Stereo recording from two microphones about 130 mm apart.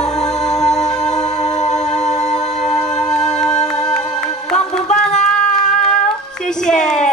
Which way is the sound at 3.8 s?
5° left (ahead or behind).